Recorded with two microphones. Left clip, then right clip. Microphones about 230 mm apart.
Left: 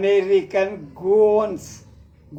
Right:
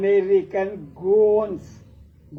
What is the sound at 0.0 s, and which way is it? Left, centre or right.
Speech, left.